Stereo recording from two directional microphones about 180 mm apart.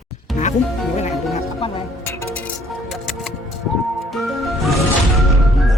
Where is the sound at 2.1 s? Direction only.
10° left (ahead or behind).